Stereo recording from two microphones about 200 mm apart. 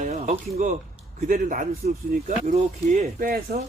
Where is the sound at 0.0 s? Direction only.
35° right (ahead or behind).